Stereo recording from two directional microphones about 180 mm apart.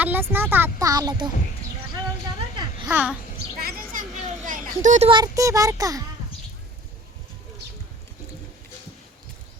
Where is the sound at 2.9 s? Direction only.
10° right (ahead or behind).